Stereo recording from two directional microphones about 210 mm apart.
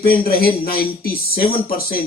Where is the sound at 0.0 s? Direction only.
45° left (ahead or behind).